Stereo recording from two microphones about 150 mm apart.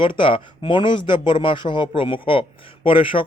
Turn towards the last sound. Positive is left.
turn(degrees=35)  # may be behind; listen again after turning